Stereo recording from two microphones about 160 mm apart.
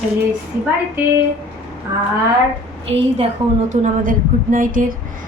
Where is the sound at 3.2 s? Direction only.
45° right (ahead or behind).